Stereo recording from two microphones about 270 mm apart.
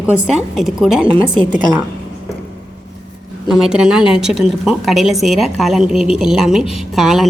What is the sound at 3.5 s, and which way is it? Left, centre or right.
A woman's voice, centre.